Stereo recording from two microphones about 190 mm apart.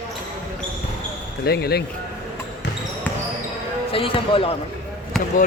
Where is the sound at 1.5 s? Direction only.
55° left (ahead or behind).